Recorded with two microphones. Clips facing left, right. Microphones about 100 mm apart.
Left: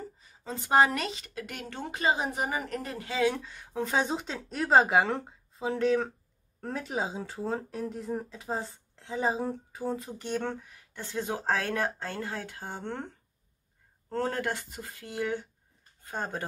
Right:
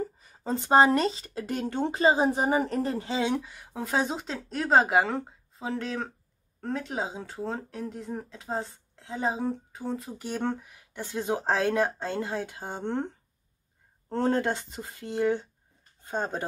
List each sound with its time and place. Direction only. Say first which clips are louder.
0.4 s speech: right 3 dB; 30° right (ahead or behind)
3.3 s speech: even; 10° right (ahead or behind)